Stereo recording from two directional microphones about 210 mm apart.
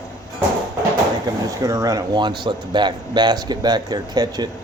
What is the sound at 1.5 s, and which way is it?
Speech, 15° right (ahead or behind).